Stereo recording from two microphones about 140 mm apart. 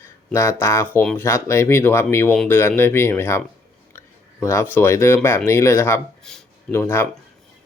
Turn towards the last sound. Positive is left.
turn(degrees=15)  # may be behind; listen again after turning